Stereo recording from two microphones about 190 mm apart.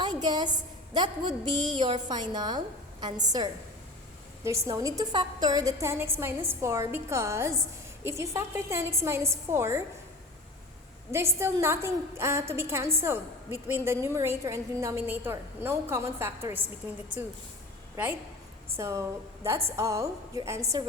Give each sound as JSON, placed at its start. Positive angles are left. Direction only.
{"t": 0.0, "sound": "a woman's voice", "side_deg": -20}
{"t": 11.1, "sound": "a woman's voice", "side_deg": -15}
{"t": 18.8, "sound": "a woman's voice", "side_deg": -15}